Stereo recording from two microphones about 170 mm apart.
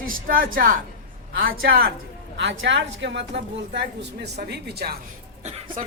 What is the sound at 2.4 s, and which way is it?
A woman's voice, 90° right.